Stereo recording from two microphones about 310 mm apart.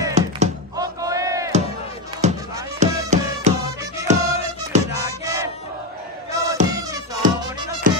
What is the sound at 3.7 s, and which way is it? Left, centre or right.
Music, centre.